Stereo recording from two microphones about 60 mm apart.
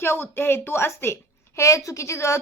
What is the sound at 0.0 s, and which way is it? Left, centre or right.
A woman's voice, left.